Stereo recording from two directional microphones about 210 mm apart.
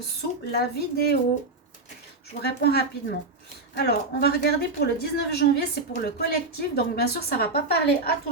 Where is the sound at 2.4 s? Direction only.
50° left (ahead or behind).